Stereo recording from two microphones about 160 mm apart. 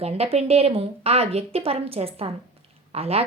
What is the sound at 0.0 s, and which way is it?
A woman's voice, 40° right (ahead or behind).